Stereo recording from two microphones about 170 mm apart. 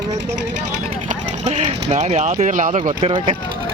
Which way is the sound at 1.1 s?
40° right (ahead or behind).